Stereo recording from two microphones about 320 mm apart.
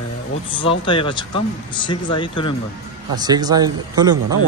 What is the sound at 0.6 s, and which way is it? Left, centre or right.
Speech, centre.